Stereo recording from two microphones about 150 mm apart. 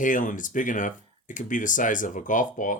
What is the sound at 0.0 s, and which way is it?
Speech, 60° left (ahead or behind).